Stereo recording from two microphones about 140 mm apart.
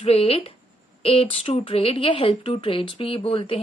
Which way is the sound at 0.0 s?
45° left (ahead or behind).